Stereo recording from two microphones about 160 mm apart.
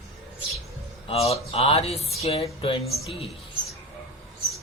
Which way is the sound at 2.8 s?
Centre (ahead or behind).